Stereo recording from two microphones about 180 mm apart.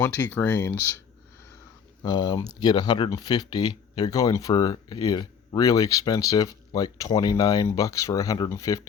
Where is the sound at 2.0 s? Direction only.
25° left (ahead or behind).